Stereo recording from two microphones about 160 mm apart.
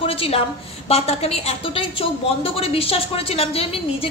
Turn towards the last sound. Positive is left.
turn(degrees=35)  # may be behind; listen again after turning